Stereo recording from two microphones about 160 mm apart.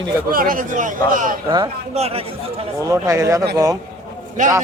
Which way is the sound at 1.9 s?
40° right (ahead or behind).